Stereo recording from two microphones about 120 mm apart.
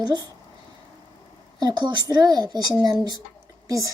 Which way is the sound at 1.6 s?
35° right (ahead or behind).